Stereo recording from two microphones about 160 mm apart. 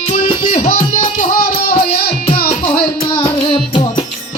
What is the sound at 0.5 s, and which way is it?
Music, 60° left (ahead or behind).